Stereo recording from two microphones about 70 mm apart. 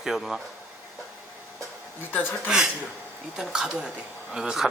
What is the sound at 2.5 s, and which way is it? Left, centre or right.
A woman's voice, centre.